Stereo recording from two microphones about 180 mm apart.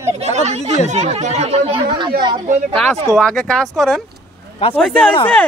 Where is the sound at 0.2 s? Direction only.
40° right (ahead or behind).